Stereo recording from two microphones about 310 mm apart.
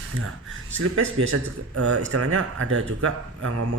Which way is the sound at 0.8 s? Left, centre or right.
Right.